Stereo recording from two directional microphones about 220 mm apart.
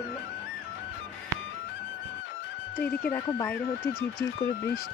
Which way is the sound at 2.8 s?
10° left (ahead or behind).